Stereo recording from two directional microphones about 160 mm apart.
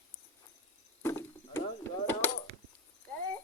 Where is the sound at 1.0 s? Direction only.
15° left (ahead or behind).